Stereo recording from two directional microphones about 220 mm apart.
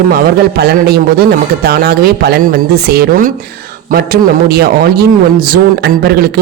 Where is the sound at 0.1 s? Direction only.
45° right (ahead or behind).